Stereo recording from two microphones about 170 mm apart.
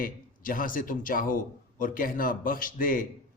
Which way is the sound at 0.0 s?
55° left (ahead or behind).